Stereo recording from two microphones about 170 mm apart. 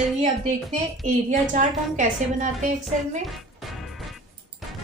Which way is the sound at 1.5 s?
45° right (ahead or behind).